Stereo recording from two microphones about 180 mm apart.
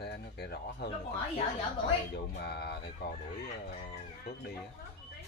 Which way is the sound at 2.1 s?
65° left (ahead or behind).